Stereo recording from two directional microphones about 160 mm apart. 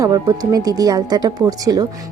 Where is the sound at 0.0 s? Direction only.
25° right (ahead or behind).